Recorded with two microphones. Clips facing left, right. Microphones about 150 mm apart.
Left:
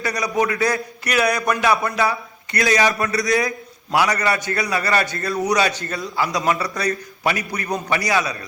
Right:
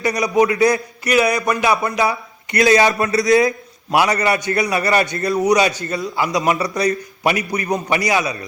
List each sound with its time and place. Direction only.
0.0 s a man's voice: 20° right (ahead or behind)